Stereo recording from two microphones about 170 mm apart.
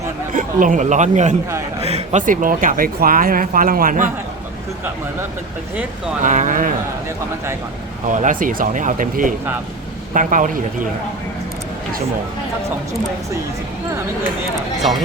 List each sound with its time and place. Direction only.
0.3 s speech: 50° right (ahead or behind)
6.2 s speech: 45° right (ahead or behind)
8.1 s speech: 50° right (ahead or behind)